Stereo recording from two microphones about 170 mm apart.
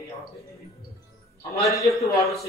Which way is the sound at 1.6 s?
20° left (ahead or behind).